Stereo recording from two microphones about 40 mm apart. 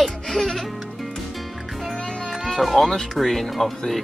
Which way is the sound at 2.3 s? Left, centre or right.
Centre.